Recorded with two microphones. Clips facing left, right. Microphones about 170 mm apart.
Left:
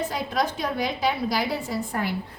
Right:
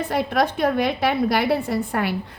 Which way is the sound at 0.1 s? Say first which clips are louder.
Right 5 dB; 60° right (ahead or behind).